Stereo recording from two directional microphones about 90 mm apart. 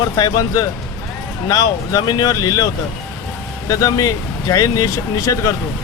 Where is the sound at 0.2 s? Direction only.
40° left (ahead or behind).